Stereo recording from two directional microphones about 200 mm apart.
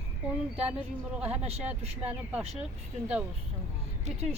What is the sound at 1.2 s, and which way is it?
Speech, 30° right (ahead or behind).